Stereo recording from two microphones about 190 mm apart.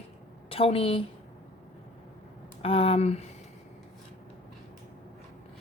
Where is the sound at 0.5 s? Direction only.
30° left (ahead or behind).